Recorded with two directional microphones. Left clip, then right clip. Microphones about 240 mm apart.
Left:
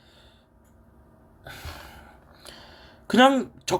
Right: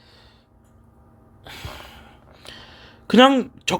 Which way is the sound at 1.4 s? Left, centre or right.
Right.